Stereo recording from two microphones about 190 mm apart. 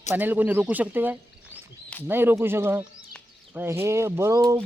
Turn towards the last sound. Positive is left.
turn(degrees=-15)  # may be behind; listen again after turning